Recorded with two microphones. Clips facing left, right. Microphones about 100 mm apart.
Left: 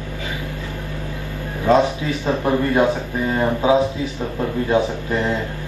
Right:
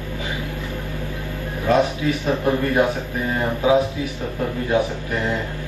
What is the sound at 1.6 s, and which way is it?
A man's voice, 20° left (ahead or behind).